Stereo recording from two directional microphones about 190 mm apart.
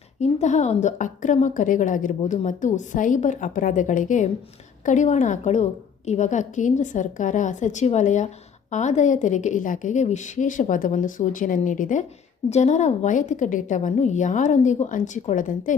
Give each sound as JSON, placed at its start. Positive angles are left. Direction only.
{"t": 0.2, "sound": "a woman's voice", "side_deg": 40}